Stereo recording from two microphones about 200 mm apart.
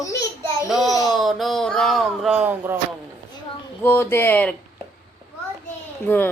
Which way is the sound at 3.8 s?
10° left (ahead or behind).